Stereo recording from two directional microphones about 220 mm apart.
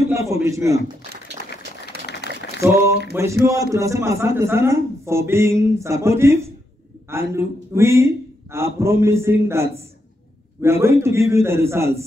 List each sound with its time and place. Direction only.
0.1 s a man's voice: 15° right (ahead or behind)
1.9 s a sound: 45° right (ahead or behind)
2.6 s a man's voice: 10° right (ahead or behind)